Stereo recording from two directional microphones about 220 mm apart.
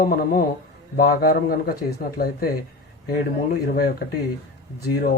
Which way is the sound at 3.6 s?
45° left (ahead or behind).